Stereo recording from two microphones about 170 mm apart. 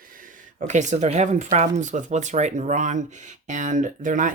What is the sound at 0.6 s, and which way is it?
Speech, 45° right (ahead or behind).